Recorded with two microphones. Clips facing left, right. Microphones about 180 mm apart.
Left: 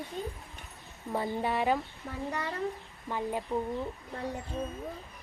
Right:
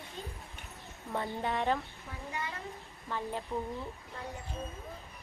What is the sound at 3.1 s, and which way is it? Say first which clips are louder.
Speech: left 4 dB; 10° left (ahead or behind).